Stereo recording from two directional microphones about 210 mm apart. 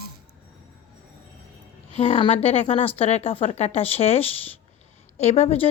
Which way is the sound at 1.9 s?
25° left (ahead or behind).